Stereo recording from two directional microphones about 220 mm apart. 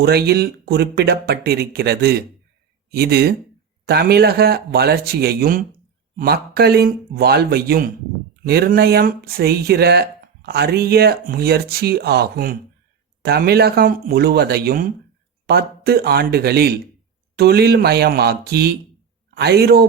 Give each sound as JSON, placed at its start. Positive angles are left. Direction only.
{"t": 0.0, "sound": "a man's voice", "side_deg": -45}